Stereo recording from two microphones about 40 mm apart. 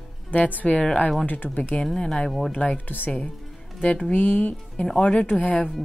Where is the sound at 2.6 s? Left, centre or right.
Left.